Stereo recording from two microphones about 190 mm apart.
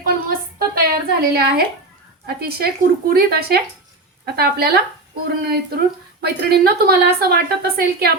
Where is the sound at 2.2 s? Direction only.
55° right (ahead or behind).